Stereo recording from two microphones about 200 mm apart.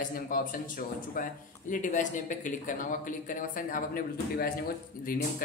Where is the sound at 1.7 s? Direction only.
40° left (ahead or behind).